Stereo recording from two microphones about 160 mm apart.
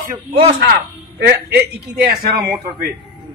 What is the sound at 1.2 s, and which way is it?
Speech, 90° right.